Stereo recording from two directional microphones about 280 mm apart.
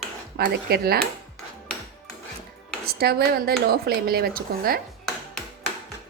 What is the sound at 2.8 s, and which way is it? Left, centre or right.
A woman's voice, right.